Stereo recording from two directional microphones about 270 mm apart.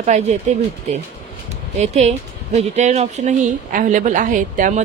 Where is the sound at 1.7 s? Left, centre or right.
Right.